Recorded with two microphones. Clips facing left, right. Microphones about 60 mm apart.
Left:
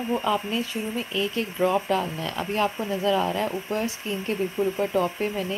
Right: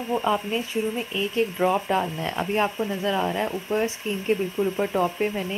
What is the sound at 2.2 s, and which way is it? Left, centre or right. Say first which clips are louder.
Speech: right 1 dB; right.